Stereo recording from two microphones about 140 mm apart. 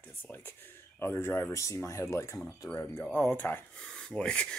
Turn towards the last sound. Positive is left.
turn(degrees=5)  # may be behind; listen again after turning